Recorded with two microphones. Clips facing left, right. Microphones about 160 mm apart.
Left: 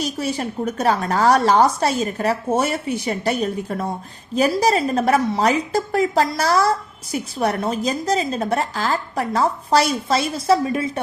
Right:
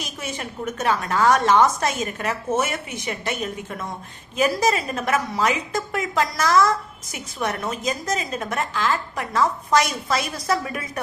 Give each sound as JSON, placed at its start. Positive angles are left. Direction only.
{"t": 0.0, "sound": "a woman's voice", "side_deg": 35}